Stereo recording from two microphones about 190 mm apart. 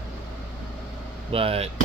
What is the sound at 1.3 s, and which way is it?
Speech, 30° right (ahead or behind).